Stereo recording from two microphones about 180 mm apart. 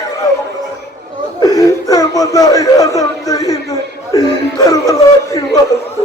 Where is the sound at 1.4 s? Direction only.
20° left (ahead or behind).